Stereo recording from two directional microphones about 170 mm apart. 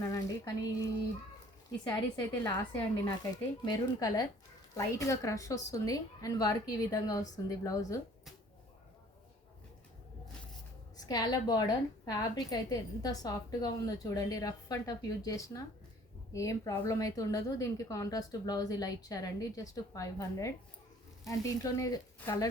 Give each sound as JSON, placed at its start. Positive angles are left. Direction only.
{"t": 0.0, "sound": "a sound", "side_deg": 20}
{"t": 2.4, "sound": "a woman's voice", "side_deg": 20}
{"t": 11.0, "sound": "a woman's voice", "side_deg": 20}